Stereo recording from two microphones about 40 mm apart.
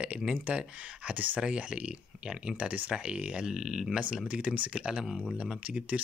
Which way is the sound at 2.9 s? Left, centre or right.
Right.